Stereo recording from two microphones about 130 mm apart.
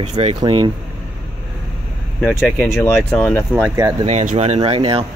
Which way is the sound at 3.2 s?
15° left (ahead or behind).